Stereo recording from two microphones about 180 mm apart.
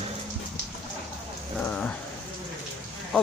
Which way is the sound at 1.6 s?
5° left (ahead or behind).